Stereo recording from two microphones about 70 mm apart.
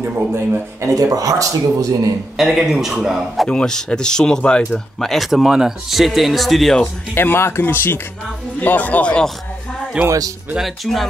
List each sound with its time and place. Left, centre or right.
0.0 s speech: right
0.7 s speech: right
2.3 s speech: centre
3.4 s speech: centre
7.2 s speech: left; by 9.3 s centre
10.0 s speech: centre
10.6 s speech: centre